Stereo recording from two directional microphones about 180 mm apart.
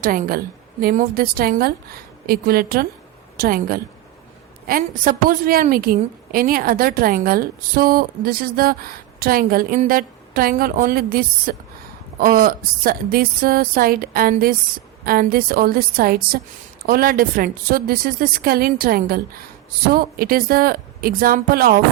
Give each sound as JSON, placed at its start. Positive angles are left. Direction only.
{"t": 0.0, "sound": "a woman's voice", "side_deg": -50}